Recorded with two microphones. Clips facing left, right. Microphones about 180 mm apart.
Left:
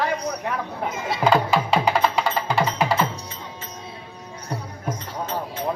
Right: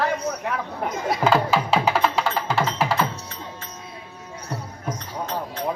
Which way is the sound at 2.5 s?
15° left (ahead or behind).